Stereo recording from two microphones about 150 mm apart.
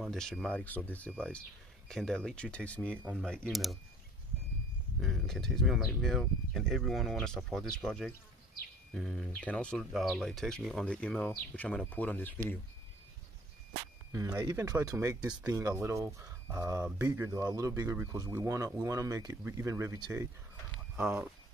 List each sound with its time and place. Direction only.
0.0 s speech: centre (ahead or behind)
5.0 s speech: centre (ahead or behind)
14.1 s speech: 20° right (ahead or behind)